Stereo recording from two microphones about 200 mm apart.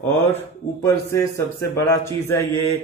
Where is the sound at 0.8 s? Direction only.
15° left (ahead or behind).